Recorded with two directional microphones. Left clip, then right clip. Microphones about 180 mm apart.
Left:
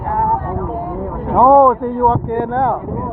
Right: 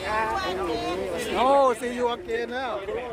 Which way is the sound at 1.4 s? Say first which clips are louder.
Left 11 dB; centre (ahead or behind).